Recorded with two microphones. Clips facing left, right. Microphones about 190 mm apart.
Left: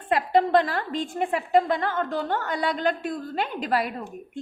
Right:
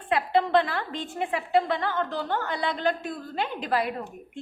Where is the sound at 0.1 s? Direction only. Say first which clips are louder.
Left 2 dB; 45° left (ahead or behind).